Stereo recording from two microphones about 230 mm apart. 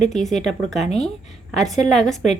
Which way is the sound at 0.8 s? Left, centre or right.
Left.